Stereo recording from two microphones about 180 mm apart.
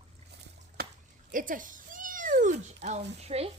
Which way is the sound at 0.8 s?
60° right (ahead or behind).